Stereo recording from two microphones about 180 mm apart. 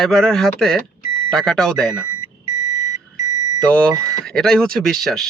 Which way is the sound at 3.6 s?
5° left (ahead or behind).